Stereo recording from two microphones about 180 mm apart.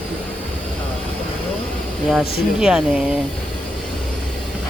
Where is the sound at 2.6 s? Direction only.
5° right (ahead or behind).